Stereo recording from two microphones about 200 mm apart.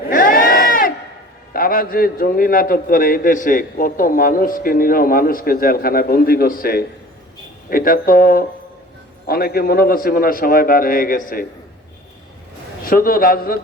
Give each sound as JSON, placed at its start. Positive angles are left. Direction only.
{"t": 0.1, "sound": "crowd", "side_deg": 45}
{"t": 1.5, "sound": "a man's voice", "side_deg": 45}
{"t": 12.8, "sound": "a man's voice", "side_deg": 45}